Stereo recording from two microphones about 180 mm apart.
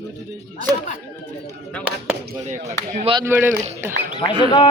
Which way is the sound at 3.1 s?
10° right (ahead or behind).